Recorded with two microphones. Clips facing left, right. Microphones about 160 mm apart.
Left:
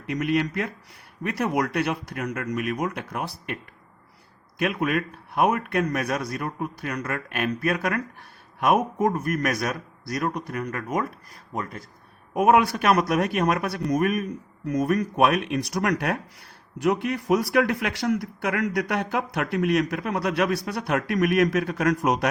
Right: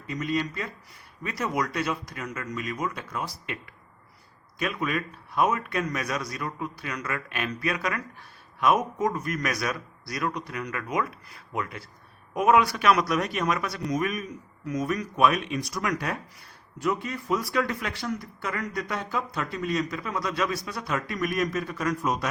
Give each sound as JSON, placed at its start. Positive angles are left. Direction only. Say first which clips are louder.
{"t": 0.1, "sound": "a man's voice", "louder": "left 5 dB", "side_deg": 70}
{"t": 12.3, "sound": "a man's voice", "louder": "left 2 dB", "side_deg": 50}